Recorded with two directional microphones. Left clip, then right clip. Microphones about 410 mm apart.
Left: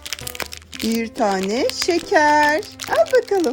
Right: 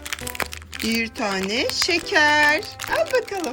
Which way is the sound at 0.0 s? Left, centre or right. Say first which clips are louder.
Right 1 dB; centre.